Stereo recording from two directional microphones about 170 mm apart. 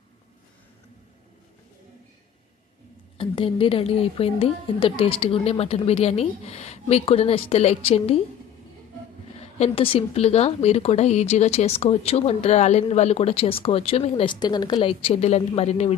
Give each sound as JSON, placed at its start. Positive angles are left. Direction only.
{"t": 3.2, "sound": "speech", "side_deg": 30}
{"t": 9.4, "sound": "speech", "side_deg": 35}